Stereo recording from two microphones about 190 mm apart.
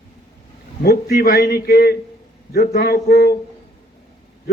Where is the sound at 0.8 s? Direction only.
55° left (ahead or behind).